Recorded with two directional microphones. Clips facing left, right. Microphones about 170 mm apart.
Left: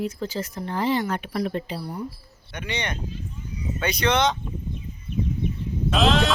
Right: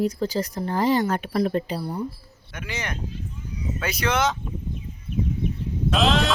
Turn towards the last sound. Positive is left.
turn(degrees=0)  # may be behind; listen again after turning